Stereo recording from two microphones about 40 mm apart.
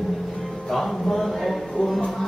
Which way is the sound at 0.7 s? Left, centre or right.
Centre.